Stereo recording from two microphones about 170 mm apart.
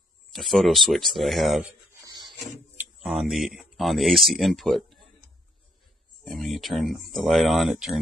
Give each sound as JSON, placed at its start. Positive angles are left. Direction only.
{"t": 0.3, "sound": "speech", "side_deg": 0}
{"t": 2.0, "sound": "a sound", "side_deg": -25}
{"t": 2.4, "sound": "speech", "side_deg": 0}
{"t": 6.2, "sound": "speech", "side_deg": 0}